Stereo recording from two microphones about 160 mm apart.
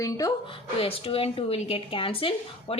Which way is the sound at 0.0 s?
20° left (ahead or behind).